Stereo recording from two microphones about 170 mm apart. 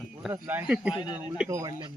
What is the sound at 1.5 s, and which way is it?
Speech, 20° right (ahead or behind).